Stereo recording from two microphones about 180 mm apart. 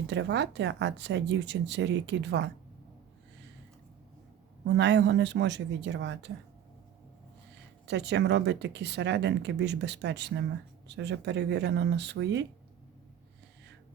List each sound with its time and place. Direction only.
0.1 s speech: 80° right
4.6 s speech: 75° right (ahead or behind)
7.9 s speech: 70° right (ahead or behind)